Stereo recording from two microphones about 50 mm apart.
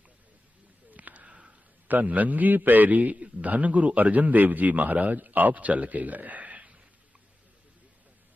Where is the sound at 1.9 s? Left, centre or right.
Right.